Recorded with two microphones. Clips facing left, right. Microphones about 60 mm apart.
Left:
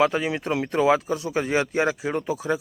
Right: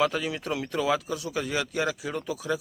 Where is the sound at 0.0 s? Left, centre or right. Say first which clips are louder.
Left 5 dB; left.